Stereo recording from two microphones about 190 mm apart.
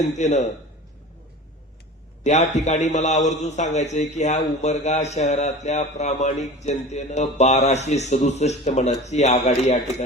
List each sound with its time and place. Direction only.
0.2 s a man's voice: 35° left (ahead or behind)
2.2 s a man's voice: 35° left (ahead or behind)